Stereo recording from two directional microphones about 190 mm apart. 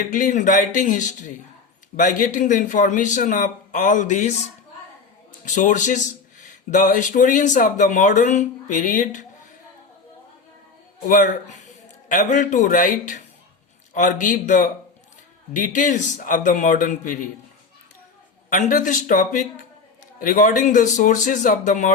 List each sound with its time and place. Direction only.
0.1 s a man's voice: 45° left (ahead or behind)
5.5 s speech: 40° left (ahead or behind)
11.0 s a man's voice: 45° left (ahead or behind)
18.5 s a man's voice: 45° left (ahead or behind)